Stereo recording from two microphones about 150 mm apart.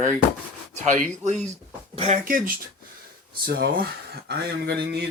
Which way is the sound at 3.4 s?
90° right.